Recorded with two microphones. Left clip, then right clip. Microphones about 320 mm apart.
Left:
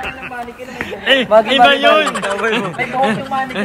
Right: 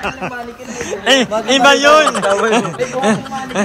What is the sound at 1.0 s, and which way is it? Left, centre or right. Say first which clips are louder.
Speech: left 3 dB; centre.